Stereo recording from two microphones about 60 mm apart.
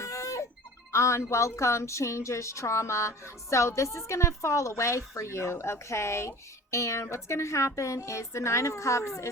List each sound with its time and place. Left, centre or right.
0.0 s music: left
0.9 s speech: left